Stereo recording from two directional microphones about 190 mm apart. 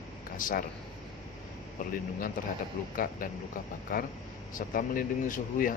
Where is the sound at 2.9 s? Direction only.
45° left (ahead or behind).